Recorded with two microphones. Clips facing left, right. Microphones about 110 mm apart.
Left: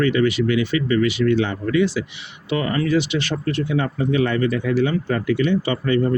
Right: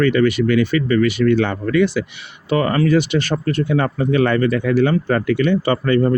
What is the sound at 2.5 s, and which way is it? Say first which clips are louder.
Speech: right 4 dB; 45° right (ahead or behind).